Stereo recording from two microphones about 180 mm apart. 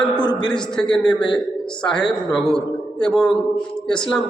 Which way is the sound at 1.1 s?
25° left (ahead or behind).